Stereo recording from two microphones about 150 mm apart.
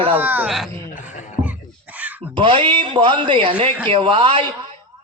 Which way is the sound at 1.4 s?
35° right (ahead or behind).